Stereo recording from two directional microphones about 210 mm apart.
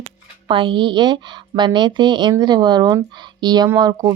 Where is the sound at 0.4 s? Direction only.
25° right (ahead or behind).